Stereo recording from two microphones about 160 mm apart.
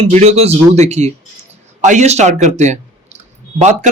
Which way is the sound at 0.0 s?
40° right (ahead or behind).